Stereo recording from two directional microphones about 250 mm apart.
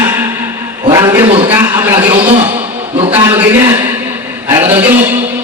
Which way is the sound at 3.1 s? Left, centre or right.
Centre.